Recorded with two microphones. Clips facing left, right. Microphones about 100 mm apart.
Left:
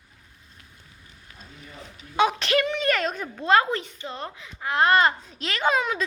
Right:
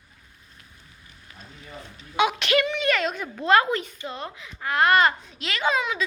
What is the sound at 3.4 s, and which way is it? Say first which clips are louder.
A woman's voice: right 1 dB; 25° left (ahead or behind).